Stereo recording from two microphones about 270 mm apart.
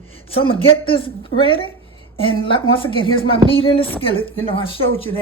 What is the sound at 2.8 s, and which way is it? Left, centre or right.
A woman's voice, centre.